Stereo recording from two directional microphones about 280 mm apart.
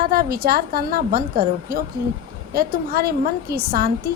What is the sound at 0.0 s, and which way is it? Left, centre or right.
A woman's voice, right.